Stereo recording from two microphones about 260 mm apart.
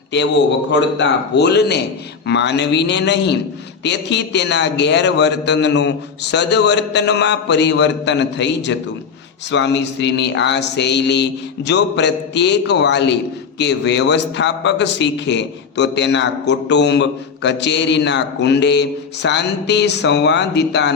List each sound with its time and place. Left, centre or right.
0.7 s a man's voice: left